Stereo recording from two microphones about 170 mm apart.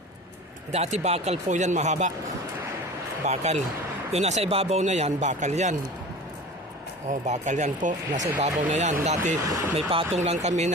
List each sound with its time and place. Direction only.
0.7 s speech: 40° right (ahead or behind)
3.2 s speech: 40° right (ahead or behind)
7.1 s speech: 45° right (ahead or behind)
9.4 s speech: 15° right (ahead or behind)
9.7 s speech: 30° right (ahead or behind)